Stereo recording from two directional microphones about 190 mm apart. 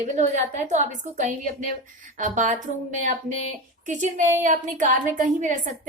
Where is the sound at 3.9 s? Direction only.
40° right (ahead or behind).